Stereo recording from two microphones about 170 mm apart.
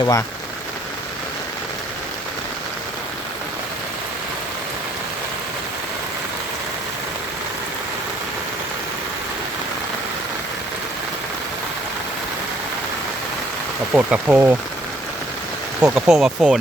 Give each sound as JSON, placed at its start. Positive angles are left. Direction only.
{"t": 0.0, "sound": "speech", "side_deg": 20}
{"t": 13.9, "sound": "speech", "side_deg": -10}
{"t": 15.8, "sound": "speech", "side_deg": -5}